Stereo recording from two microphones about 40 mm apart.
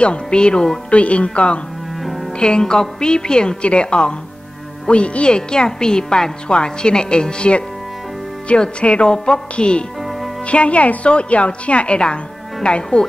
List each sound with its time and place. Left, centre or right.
0.0 s a woman's voice: left
2.0 s music: centre
2.3 s a woman's voice: left
10.0 s music: centre
10.4 s a woman's voice: left